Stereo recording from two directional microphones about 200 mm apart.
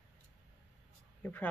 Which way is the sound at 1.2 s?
10° left (ahead or behind).